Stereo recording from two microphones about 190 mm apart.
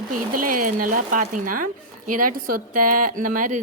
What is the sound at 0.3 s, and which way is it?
Speech, 45° right (ahead or behind).